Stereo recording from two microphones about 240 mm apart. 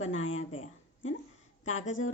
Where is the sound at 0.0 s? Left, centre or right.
Left.